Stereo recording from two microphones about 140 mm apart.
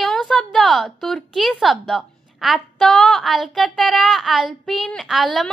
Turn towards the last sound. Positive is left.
turn(degrees=0)  # may be behind; listen again after turning